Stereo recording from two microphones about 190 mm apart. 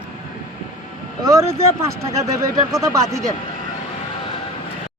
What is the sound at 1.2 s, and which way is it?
Speech, 15° right (ahead or behind).